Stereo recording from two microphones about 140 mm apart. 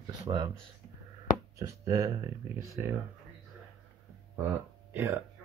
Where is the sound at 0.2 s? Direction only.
25° right (ahead or behind).